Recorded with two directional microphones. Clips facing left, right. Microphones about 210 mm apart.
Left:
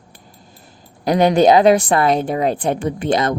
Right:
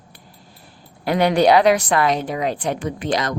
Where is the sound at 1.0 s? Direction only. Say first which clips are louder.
Left 3 dB; 40° left (ahead or behind).